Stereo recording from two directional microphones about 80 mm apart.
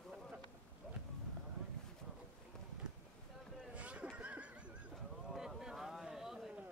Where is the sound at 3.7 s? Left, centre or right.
Centre.